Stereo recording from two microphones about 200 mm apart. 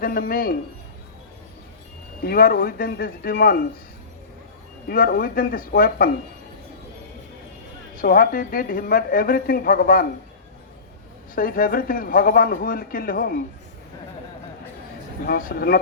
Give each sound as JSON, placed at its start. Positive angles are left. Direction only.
{"t": 0.0, "sound": "a woman's voice", "side_deg": 45}
{"t": 2.2, "sound": "a woman's voice", "side_deg": 45}
{"t": 4.9, "sound": "a woman's voice", "side_deg": 45}
{"t": 7.9, "sound": "a woman's voice", "side_deg": 45}
{"t": 11.3, "sound": "a woman's voice", "side_deg": 45}
{"t": 15.3, "sound": "a woman's voice", "side_deg": 45}